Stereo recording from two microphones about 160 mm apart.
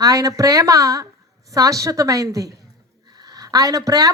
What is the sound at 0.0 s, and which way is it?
A woman's voice, 20° right (ahead or behind).